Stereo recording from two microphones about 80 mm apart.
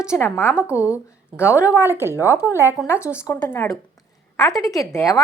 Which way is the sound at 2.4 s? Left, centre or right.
Right.